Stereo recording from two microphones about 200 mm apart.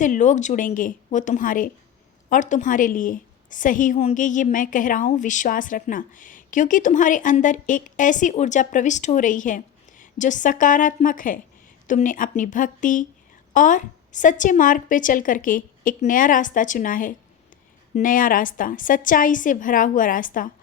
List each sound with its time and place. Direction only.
0.0 s a woman's voice: 40° left (ahead or behind)